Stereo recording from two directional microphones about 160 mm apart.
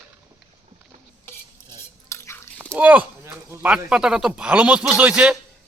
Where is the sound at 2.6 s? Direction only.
10° right (ahead or behind).